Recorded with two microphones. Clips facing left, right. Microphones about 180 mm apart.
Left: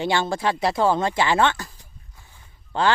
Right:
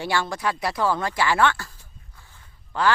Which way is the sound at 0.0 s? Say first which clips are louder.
Left 3 dB; 25° left (ahead or behind).